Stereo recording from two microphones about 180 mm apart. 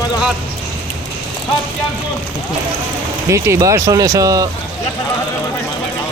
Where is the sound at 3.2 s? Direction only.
15° right (ahead or behind).